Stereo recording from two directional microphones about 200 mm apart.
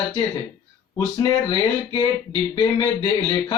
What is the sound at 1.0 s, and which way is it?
Speech, 20° left (ahead or behind).